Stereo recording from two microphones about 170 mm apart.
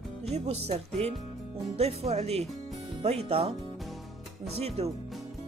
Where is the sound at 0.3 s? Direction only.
40° right (ahead or behind).